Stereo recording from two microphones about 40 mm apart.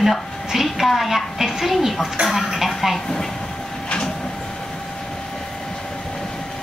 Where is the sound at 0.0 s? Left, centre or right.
Centre.